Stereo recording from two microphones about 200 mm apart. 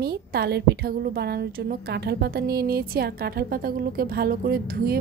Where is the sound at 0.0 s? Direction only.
50° right (ahead or behind).